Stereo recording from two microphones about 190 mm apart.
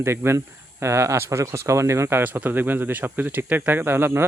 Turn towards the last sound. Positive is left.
turn(degrees=-10)  # may be behind; listen again after turning